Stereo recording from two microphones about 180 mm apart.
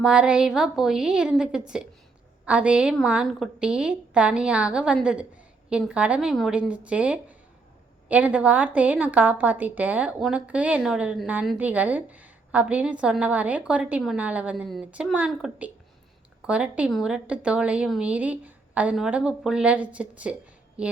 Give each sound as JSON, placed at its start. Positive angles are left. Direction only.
{"t": 0.0, "sound": "a woman's voice", "side_deg": -5}